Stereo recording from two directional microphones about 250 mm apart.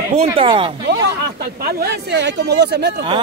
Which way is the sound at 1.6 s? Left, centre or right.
Right.